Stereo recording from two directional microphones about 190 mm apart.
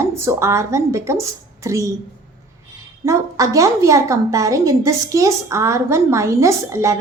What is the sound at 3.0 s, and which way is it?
A woman's voice, 15° right (ahead or behind).